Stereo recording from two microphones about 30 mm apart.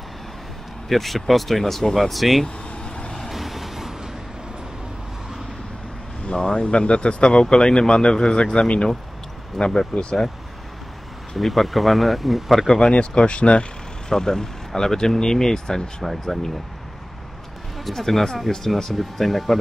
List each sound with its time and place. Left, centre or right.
0.8 s speech: centre
2.4 s vehicle: left
3.3 s vehicle: centre
6.3 s speech: left
6.6 s speech: left
9.6 s speech: centre
11.3 s speech: centre
12.8 s speech: left
14.0 s speech: left
16.0 s speech: centre
17.8 s speech: centre